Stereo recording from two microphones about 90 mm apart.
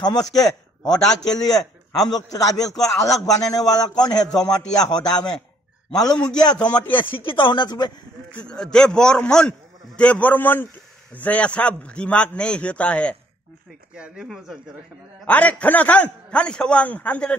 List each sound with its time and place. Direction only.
0.3 s a man's voice: 45° left (ahead or behind)
3.2 s a man's voice: 5° left (ahead or behind)
3.6 s a man's voice: 50° left (ahead or behind)
6.0 s a man's voice: 10° left (ahead or behind)
6.3 s a man's voice: 50° left (ahead or behind)
6.6 s speech: 20° left (ahead or behind)
7.0 s speech: 75° left (ahead or behind); by 7.9 s 50° left (ahead or behind)
8.5 s a man's voice: 10° left (ahead or behind)
13.9 s speech: 10° right (ahead or behind)
15.2 s a man's voice: 15° left (ahead or behind)